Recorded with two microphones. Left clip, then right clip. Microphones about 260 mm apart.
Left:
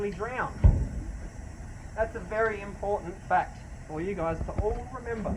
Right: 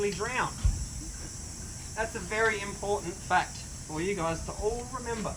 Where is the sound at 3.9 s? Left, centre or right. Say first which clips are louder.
Even; right.